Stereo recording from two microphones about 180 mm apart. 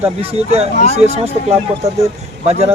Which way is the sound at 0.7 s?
40° left (ahead or behind).